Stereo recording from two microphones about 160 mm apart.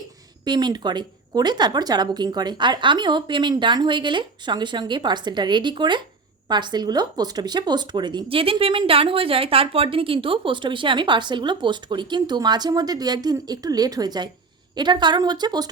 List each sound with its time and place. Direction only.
0.4 s speech: 25° right (ahead or behind)